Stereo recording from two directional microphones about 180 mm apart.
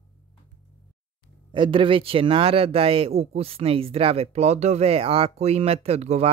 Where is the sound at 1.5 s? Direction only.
25° right (ahead or behind).